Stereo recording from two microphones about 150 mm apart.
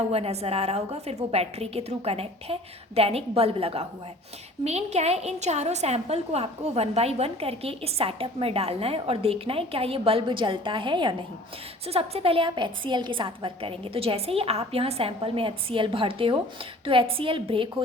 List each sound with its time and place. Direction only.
0.1 s a woman's voice: 45° right (ahead or behind)